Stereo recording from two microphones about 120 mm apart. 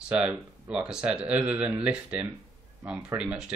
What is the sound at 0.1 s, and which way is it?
Speech, 10° right (ahead or behind).